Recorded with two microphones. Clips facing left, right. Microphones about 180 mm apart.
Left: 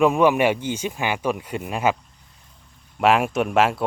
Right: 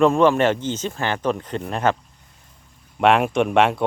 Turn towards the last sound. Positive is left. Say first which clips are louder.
# right 2 dB
turn(degrees=5)  # may be behind; listen again after turning